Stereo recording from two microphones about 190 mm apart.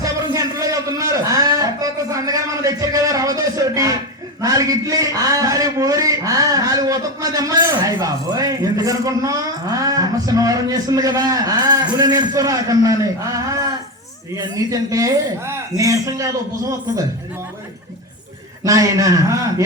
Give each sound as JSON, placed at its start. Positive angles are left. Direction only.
{"t": 0.0, "sound": "a man's voice", "side_deg": -20}
{"t": 18.6, "sound": "a woman's voice", "side_deg": -20}